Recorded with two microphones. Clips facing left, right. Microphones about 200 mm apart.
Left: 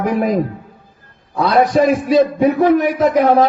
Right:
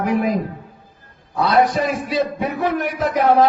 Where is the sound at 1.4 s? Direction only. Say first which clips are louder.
Left 4 dB; 45° left (ahead or behind).